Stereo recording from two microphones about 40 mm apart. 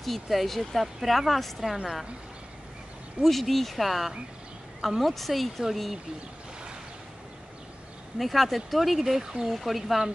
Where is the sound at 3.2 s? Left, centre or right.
Centre.